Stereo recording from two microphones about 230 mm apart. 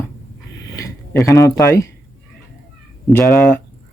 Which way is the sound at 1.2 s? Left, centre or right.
Centre.